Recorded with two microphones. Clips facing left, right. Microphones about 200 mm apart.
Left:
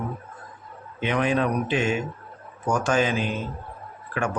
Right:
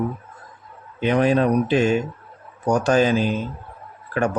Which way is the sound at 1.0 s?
35° right (ahead or behind).